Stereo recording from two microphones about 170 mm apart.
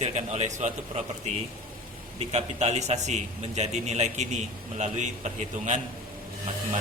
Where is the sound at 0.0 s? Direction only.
40° right (ahead or behind).